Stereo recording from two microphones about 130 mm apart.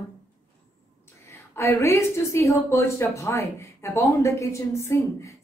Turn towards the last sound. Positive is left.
turn(degrees=20)  # may be behind; listen again after turning